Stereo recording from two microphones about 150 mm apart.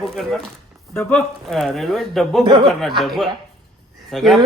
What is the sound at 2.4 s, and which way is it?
Speech, 30° right (ahead or behind).